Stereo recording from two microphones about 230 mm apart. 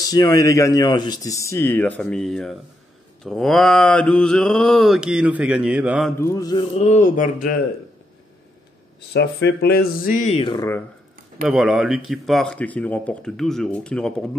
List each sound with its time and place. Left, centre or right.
0.0 s speech: centre
3.3 s mantra: centre
6.1 s speech: centre; by 7.5 s left
9.1 s speech: left; by 10.8 s centre
11.4 s mantra: centre